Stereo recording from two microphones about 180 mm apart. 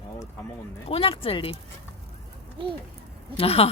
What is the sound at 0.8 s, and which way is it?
Speech, 30° left (ahead or behind).